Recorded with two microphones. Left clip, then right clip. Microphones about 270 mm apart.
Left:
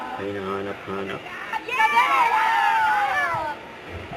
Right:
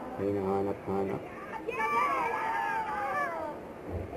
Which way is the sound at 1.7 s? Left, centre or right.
Centre.